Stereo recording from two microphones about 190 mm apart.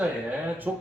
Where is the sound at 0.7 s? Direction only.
10° right (ahead or behind).